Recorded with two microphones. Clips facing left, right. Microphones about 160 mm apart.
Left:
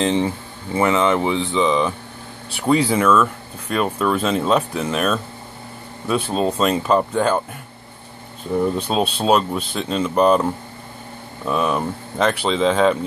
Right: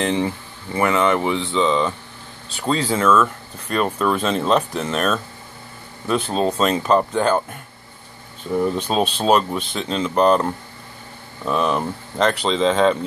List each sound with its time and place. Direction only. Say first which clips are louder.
0.0 s speech: left 2 dB; 25° left (ahead or behind); by 7.4 s 5° left (ahead or behind)
8.5 s speech: even; 5° left (ahead or behind)